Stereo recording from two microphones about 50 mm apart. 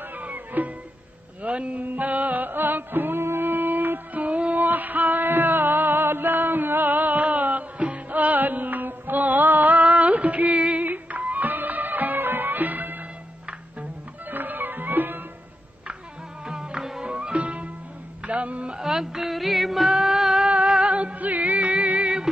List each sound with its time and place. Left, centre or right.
0.1 s music: right
14.3 s music: right
16.4 s music: centre
17.0 s music: right
18.7 s music: centre
20.4 s humming: right
20.7 s music: right